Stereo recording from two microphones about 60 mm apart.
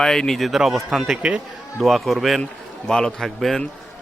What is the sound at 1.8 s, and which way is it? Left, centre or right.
Speech, centre.